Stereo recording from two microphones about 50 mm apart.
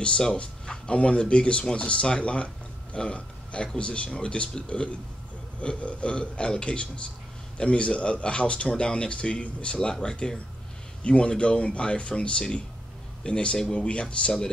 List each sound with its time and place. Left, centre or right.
0.0 s speech: centre